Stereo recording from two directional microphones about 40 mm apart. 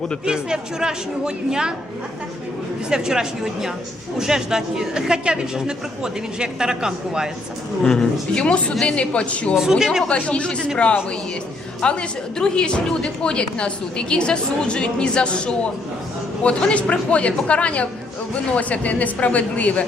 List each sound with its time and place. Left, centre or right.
0.3 s speech: centre
2.9 s a woman's voice: centre
7.9 s speech: centre
8.8 s a woman's voice: left
9.6 s a woman's voice: centre
10.1 s a woman's voice: left
11.8 s a woman's voice: left